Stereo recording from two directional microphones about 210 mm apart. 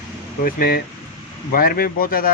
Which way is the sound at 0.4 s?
45° left (ahead or behind).